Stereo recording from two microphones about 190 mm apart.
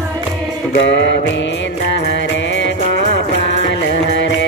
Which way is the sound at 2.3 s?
70° left (ahead or behind).